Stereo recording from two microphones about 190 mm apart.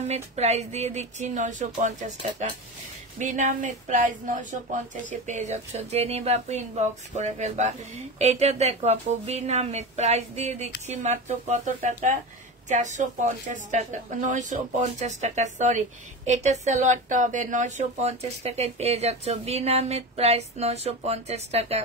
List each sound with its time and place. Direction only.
0.1 s speech: 35° right (ahead or behind)
3.2 s speech: 40° right (ahead or behind)